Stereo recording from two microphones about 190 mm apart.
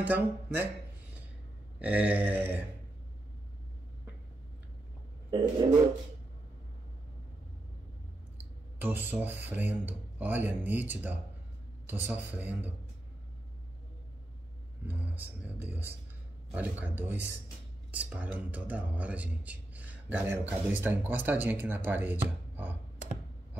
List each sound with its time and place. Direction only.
0.0 s speech: 10° right (ahead or behind)
1.8 s speech: 5° right (ahead or behind)
5.3 s speech: 25° right (ahead or behind)
8.7 s speech: 10° right (ahead or behind)
14.9 s speech: 10° right (ahead or behind)